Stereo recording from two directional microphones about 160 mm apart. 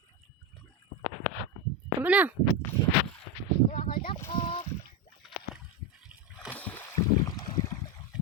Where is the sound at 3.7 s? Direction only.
65° left (ahead or behind).